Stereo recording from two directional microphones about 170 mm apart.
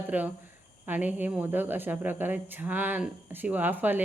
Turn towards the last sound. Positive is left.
turn(degrees=-10)  # may be behind; listen again after turning